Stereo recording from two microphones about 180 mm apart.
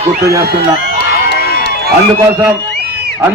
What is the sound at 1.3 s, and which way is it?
Run, 60° left (ahead or behind).